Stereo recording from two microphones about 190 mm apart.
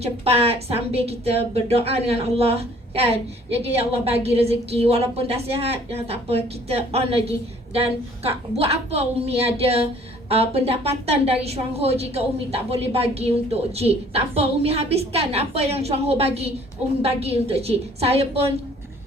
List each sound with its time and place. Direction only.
0.0 s speech: 30° right (ahead or behind)